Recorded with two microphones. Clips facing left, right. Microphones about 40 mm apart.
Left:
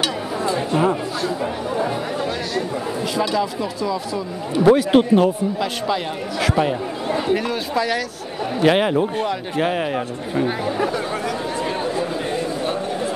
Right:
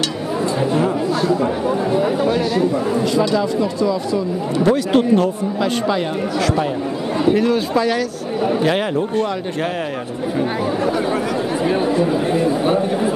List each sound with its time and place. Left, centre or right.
2.0 s speech: centre
4.6 s speech: centre
7.2 s a man's voice: centre
8.6 s speech: centre